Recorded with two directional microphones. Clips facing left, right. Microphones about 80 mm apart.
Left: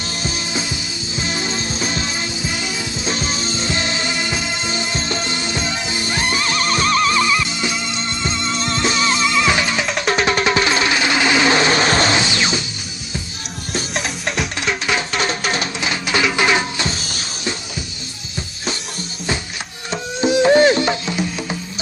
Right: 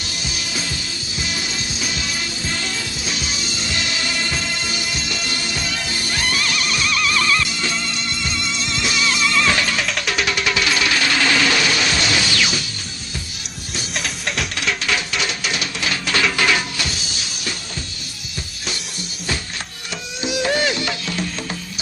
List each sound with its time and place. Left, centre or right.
0.2 s music: left
2.4 s music: centre
3.1 s music: left
7.2 s music: centre
8.5 s music: left
9.3 s music: centre
10.0 s music: left
13.9 s music: centre
14.6 s music: left
15.1 s music: left
15.8 s music: centre
19.9 s music: left